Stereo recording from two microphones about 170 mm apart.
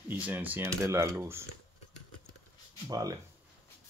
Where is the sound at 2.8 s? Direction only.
20° right (ahead or behind).